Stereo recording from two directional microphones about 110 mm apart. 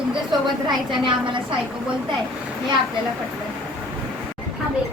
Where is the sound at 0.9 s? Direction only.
45° right (ahead or behind).